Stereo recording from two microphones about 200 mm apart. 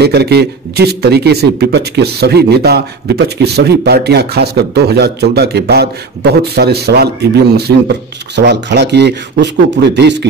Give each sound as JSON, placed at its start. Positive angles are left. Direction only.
{"t": 0.0, "sound": "a man's voice", "side_deg": -55}